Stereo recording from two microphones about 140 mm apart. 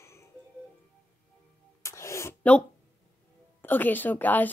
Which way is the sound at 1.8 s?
20° left (ahead or behind).